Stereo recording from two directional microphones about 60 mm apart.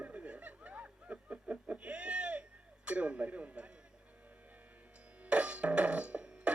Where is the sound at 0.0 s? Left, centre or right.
Right.